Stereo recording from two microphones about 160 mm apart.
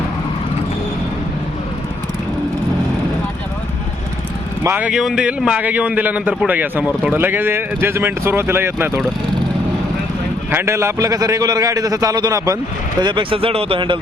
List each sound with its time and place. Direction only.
4.6 s a man's voice: 10° right (ahead or behind)
10.5 s a man's voice: 15° right (ahead or behind); by 14.0 s 30° right (ahead or behind)